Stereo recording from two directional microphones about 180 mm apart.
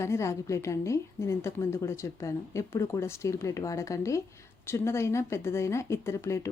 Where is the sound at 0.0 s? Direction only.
15° left (ahead or behind).